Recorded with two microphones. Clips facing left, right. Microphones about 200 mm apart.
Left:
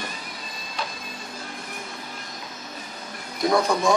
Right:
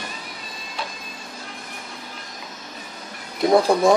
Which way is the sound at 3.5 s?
30° right (ahead or behind).